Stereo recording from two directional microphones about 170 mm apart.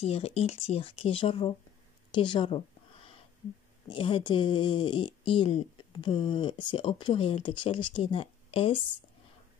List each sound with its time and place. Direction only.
0.0 s speech: 35° left (ahead or behind)
3.9 s speech: 30° left (ahead or behind)